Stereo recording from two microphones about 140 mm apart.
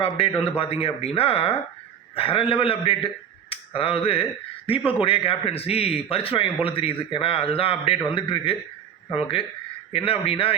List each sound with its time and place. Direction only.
0.0 s a man's voice: 40° left (ahead or behind)